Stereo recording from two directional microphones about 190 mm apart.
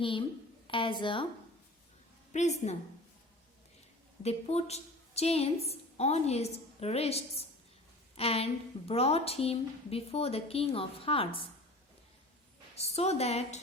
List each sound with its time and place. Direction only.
0.0 s a woman's voice: 25° left (ahead or behind)
2.3 s a woman's voice: 35° left (ahead or behind)
4.2 s a woman's voice: 35° left (ahead or behind)
12.7 s a woman's voice: 35° left (ahead or behind)